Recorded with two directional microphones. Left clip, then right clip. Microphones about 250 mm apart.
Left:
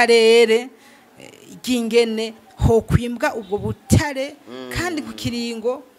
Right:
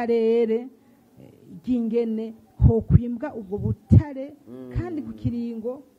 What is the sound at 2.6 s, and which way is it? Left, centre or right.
Speech, left.